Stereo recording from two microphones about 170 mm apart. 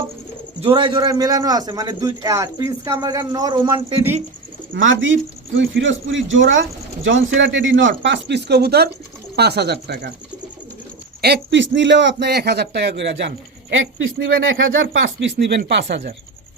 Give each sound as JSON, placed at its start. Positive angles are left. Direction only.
{"t": 0.6, "sound": "a man's voice", "side_deg": -30}
{"t": 4.7, "sound": "a man's voice", "side_deg": -90}
{"t": 11.2, "sound": "a man's voice", "side_deg": -80}
{"t": 14.5, "sound": "a man's voice", "side_deg": -90}